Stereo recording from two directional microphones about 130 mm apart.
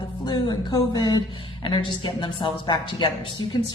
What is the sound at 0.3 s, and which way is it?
A woman's voice, 35° left (ahead or behind).